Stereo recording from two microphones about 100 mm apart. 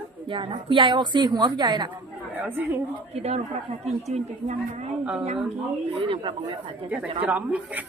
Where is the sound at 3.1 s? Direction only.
90° right.